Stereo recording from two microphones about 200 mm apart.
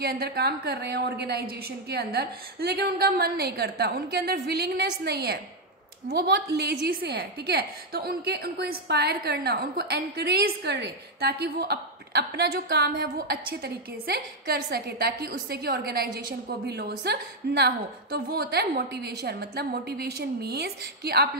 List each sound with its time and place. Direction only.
0.0 s a woman's voice: 50° right (ahead or behind)